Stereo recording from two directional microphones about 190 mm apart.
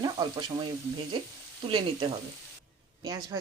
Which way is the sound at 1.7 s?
25° right (ahead or behind).